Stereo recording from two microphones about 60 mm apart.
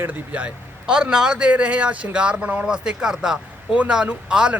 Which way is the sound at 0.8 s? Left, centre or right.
Centre.